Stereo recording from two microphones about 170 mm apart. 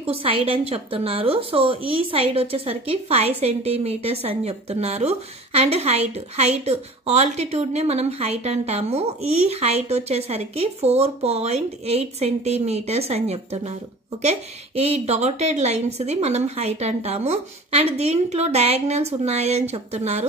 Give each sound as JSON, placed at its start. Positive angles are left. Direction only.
{"t": 0.0, "sound": "a woman's voice", "side_deg": -35}
{"t": 14.8, "sound": "a woman's voice", "side_deg": -40}